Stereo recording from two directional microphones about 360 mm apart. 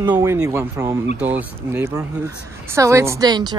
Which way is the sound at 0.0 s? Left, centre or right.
Centre.